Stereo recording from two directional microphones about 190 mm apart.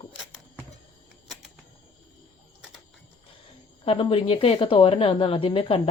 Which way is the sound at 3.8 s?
30° left (ahead or behind).